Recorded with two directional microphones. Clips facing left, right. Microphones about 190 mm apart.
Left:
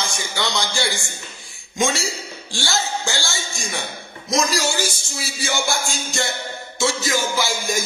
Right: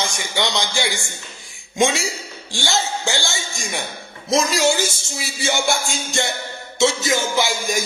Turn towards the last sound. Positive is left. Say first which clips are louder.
# right 2 dB
turn(degrees=-15)  # may be behind; listen again after turning